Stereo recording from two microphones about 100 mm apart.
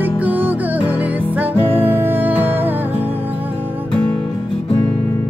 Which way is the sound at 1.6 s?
20° right (ahead or behind).